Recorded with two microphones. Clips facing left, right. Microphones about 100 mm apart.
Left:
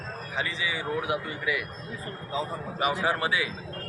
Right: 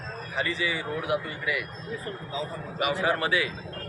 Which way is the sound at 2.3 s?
35° left (ahead or behind).